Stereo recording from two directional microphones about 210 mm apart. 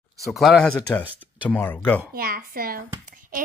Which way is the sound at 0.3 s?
Centre (ahead or behind).